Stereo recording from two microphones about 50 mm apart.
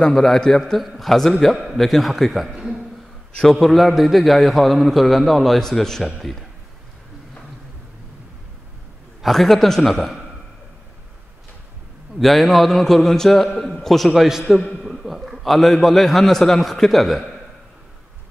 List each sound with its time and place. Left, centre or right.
0.1 s a man's voice: centre
3.5 s a man's voice: centre
9.2 s a man's voice: centre
12.2 s a man's voice: centre
13.6 s a man's voice: centre
13.8 s a man's voice: centre